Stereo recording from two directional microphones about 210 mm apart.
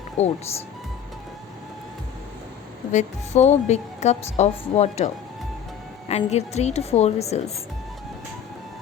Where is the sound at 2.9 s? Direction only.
35° left (ahead or behind).